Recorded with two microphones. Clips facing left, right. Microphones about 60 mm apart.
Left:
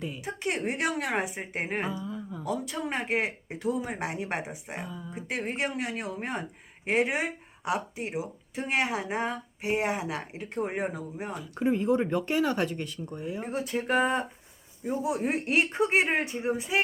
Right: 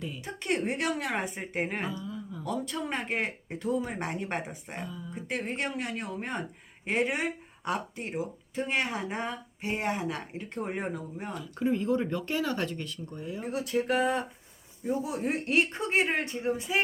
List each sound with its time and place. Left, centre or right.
0.0 s speech: centre